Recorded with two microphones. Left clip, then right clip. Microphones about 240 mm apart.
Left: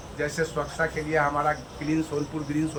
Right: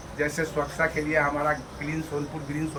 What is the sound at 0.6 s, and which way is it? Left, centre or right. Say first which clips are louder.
Speech: right 2 dB; left.